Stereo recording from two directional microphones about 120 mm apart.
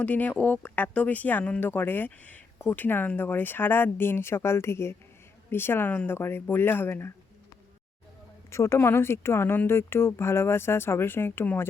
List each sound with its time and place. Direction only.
0.0 s speech: 10° left (ahead or behind)
8.4 s speech: 25° left (ahead or behind)